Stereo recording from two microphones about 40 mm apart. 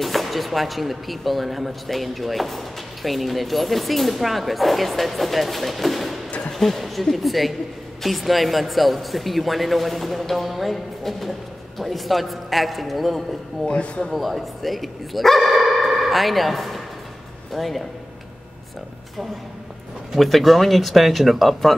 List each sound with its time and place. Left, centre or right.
0.0 s speech: centre
13.7 s speech: left
14.1 s speech: centre
20.2 s speech: centre